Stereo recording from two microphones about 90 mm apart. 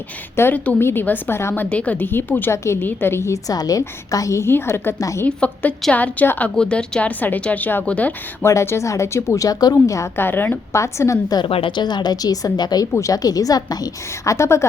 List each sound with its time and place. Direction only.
0.3 s a woman's voice: 20° left (ahead or behind)
1.7 s a woman's voice: 15° left (ahead or behind)
4.9 s speech: 40° left (ahead or behind)
5.2 s a woman's voice: 20° left (ahead or behind)
8.4 s speech: 30° left (ahead or behind)
10.2 s a woman's voice: 25° left (ahead or behind)
11.4 s a woman's voice: 80° left; by 14.3 s 45° left (ahead or behind)
14.3 s speech: 30° left (ahead or behind)